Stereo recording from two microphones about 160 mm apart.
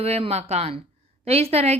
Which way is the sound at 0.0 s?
40° right (ahead or behind).